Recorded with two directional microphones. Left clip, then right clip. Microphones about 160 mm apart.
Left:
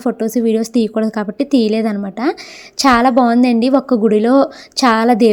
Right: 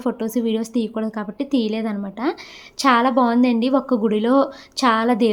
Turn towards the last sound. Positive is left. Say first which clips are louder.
# left 6 dB
turn(degrees=35)  # may be behind; listen again after turning